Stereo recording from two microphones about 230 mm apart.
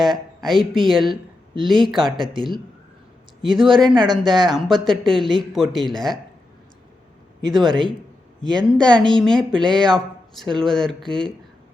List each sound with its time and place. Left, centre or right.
0.0 s speech: centre
2.3 s speech: right
3.4 s speech: centre
7.5 s speech: centre